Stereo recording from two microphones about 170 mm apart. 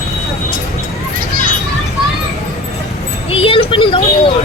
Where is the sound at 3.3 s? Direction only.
35° left (ahead or behind).